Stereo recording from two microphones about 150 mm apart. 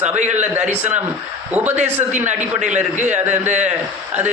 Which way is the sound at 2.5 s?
55° right (ahead or behind).